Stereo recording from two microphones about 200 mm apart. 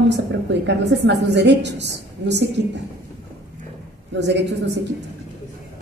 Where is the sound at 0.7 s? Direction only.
60° right (ahead or behind).